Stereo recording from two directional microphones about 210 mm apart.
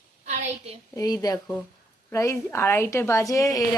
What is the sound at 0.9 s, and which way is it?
A woman's voice, 15° left (ahead or behind).